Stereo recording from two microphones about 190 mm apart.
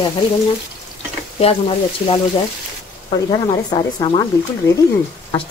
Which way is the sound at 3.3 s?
25° left (ahead or behind).